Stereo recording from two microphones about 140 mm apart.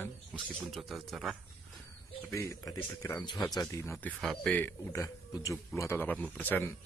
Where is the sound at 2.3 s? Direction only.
20° left (ahead or behind).